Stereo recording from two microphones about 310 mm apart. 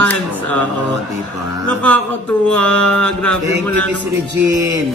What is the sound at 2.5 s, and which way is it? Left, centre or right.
Speech, centre.